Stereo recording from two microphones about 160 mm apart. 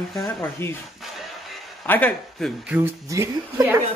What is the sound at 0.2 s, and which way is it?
Speech, 15° left (ahead or behind).